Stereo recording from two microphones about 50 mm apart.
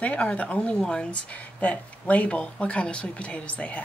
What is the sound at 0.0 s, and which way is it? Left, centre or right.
Speech, left.